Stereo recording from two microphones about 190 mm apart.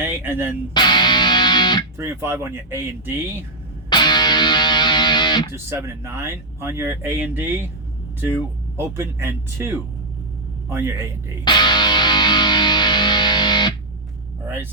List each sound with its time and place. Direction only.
0.0 s speech: 10° right (ahead or behind)
0.7 s music: 25° left (ahead or behind)
2.0 s speech: 15° right (ahead or behind)
3.8 s music: 25° left (ahead or behind)
5.6 s speech: 15° right (ahead or behind)
8.7 s speech: 15° right (ahead or behind)
11.4 s music: 25° left (ahead or behind)
14.4 s vehicle: 10° right (ahead or behind)